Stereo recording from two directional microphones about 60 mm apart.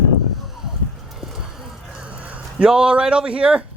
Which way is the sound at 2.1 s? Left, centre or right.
Right.